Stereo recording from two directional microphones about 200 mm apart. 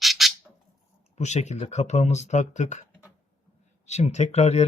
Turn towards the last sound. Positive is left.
turn(degrees=35)  # may be behind; listen again after turning